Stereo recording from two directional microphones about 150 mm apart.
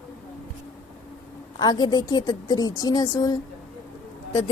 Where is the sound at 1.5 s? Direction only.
25° left (ahead or behind).